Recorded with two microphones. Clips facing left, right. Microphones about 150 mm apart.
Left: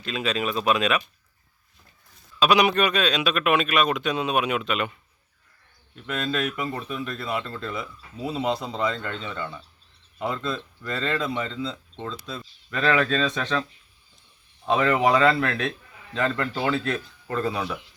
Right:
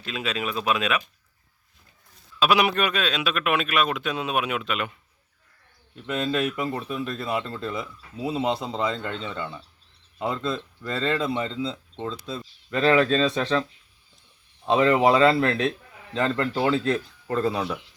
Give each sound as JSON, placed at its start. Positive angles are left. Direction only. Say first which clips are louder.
{"t": 0.0, "sound": "speech", "louder": "left 3 dB", "side_deg": -5}
{"t": 2.4, "sound": "speech", "louder": "left 2 dB", "side_deg": -5}
{"t": 6.0, "sound": "speech", "louder": "right 2 dB", "side_deg": -20}
{"t": 14.7, "sound": "speech", "louder": "right 2 dB", "side_deg": -25}